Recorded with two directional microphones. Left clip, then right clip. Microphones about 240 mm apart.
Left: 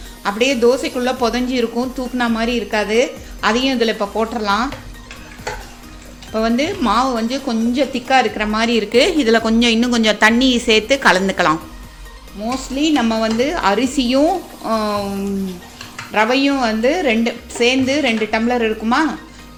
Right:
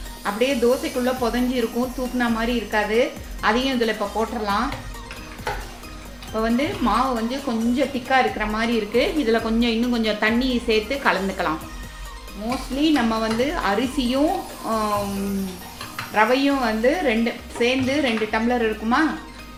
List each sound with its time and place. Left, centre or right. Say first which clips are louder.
0.2 s a woman's voice: left 5 dB; left
6.3 s a woman's voice: left 5 dB; left
16.1 s a woman's voice: left 3 dB; left